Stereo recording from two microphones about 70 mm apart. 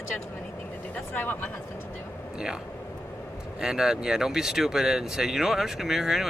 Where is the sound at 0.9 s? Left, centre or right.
Left.